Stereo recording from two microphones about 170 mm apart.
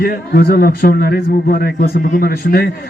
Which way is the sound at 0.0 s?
65° left (ahead or behind).